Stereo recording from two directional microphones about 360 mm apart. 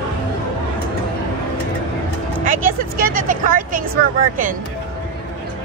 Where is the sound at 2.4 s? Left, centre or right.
Right.